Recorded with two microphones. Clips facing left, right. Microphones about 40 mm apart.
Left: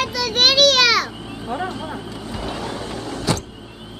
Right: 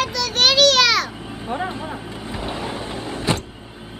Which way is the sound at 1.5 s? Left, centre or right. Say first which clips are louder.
Even; right.